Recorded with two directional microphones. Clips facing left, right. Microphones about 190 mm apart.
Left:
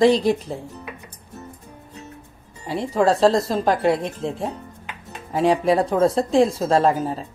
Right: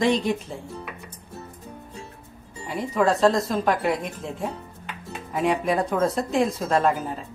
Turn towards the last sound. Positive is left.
turn(degrees=30)  # may be behind; listen again after turning